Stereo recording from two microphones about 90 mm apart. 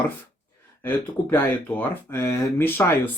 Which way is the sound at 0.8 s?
25° left (ahead or behind).